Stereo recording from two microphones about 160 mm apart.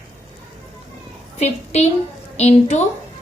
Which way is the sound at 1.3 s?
45° left (ahead or behind).